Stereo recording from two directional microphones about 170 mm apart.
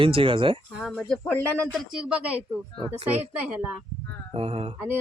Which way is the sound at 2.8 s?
35° right (ahead or behind).